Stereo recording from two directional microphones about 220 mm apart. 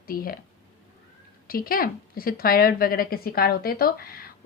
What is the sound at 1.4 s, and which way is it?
A woman's voice, 40° left (ahead or behind).